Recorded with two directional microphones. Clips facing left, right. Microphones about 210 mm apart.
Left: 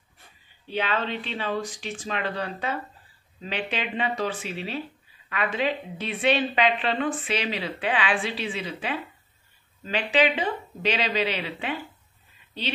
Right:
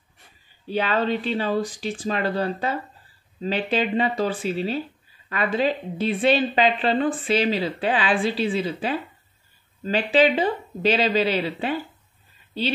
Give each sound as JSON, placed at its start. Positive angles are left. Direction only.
{"t": 0.7, "sound": "a woman's voice", "side_deg": -40}